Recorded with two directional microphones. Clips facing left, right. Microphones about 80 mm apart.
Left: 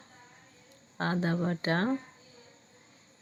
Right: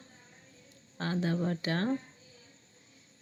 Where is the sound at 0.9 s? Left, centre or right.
Left.